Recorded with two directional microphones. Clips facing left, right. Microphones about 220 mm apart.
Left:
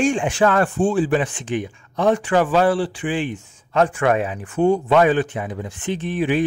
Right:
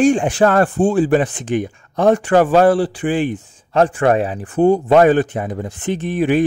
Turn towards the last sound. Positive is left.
turn(degrees=-45)  # may be behind; listen again after turning